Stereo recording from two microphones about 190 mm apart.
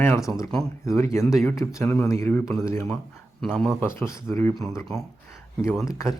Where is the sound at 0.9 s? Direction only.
15° left (ahead or behind).